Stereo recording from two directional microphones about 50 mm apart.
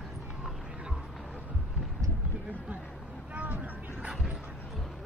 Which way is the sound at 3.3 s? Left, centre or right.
Right.